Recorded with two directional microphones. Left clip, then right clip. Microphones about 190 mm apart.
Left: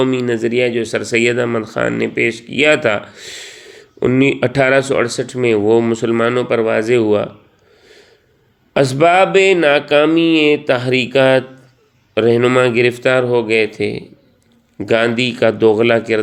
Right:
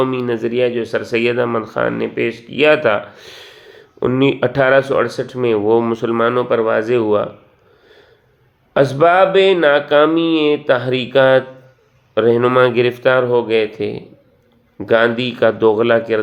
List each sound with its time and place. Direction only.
0.0 s speech: 25° left (ahead or behind)
8.7 s speech: 30° left (ahead or behind)